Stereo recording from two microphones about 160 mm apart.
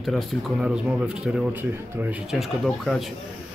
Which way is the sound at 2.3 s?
Centre (ahead or behind).